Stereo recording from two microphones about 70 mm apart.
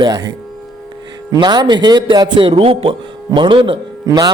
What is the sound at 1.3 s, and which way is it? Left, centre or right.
Speech, right.